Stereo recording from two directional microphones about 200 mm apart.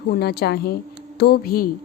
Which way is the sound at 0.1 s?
50° left (ahead or behind).